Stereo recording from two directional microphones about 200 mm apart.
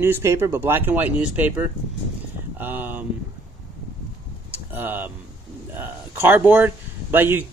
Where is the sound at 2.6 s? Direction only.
10° right (ahead or behind).